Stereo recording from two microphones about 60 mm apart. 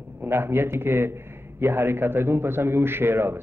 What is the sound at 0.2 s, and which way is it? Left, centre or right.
A man's voice, right.